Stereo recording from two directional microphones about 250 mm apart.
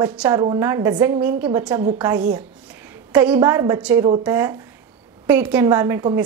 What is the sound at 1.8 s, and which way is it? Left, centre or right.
Speech, right.